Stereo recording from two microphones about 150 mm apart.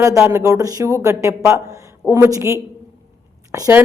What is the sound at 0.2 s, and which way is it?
Speech, 20° right (ahead or behind).